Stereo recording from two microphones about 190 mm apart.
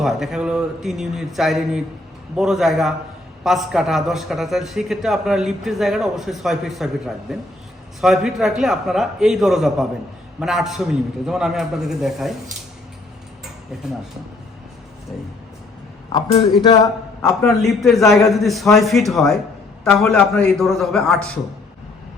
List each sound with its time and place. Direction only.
0.0 s a man's voice: centre (ahead or behind)
16.6 s a man's voice: 20° left (ahead or behind)
17.4 s a man's voice: centre (ahead or behind)